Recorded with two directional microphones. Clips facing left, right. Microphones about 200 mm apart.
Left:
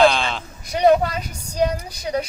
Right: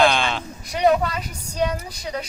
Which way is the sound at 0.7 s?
35° left (ahead or behind).